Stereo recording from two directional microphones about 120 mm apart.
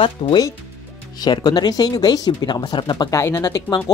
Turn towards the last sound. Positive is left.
turn(degrees=30)  # may be behind; listen again after turning